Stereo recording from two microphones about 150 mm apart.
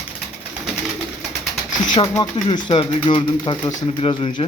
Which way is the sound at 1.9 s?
30° left (ahead or behind).